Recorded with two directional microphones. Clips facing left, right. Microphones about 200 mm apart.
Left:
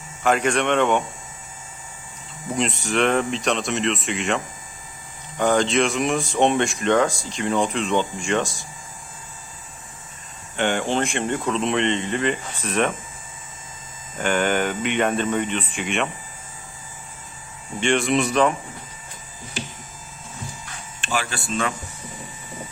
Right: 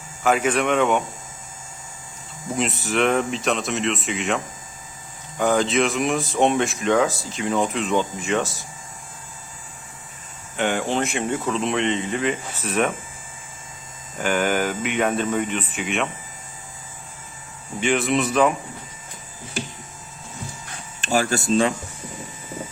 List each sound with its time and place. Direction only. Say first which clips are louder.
0.2 s speech: even; 5° right (ahead or behind)
2.6 s speech: even; 5° right (ahead or behind)
5.4 s speech: even; 5° right (ahead or behind)
10.6 s speech: even; 5° right (ahead or behind)
14.2 s speech: even; 5° right (ahead or behind)
17.7 s speech: left 1 dB; 5° right (ahead or behind)
21.0 s speech: right 6 dB; 40° right (ahead or behind)